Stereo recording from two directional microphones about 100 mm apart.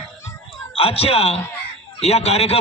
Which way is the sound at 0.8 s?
80° left.